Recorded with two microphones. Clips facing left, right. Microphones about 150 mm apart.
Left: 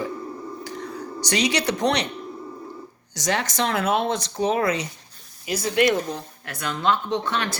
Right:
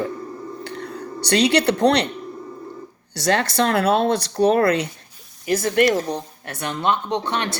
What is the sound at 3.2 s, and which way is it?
Speech, 60° right (ahead or behind).